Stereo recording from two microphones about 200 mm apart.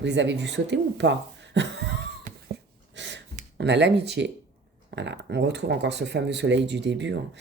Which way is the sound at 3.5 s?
60° right (ahead or behind).